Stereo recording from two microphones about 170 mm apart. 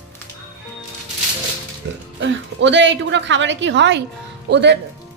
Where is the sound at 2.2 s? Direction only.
90° right.